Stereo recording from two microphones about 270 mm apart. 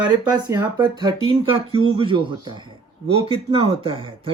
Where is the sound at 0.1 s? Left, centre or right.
Centre.